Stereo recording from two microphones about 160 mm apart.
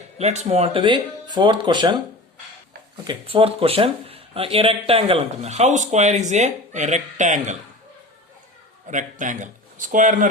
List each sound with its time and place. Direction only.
0.2 s speech: 45° right (ahead or behind)
3.0 s speech: 30° right (ahead or behind); by 7.5 s 50° right (ahead or behind)
8.9 s a man's voice: 50° right (ahead or behind)